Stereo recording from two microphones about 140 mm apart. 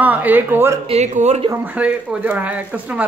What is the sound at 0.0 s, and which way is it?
Speech, 10° right (ahead or behind).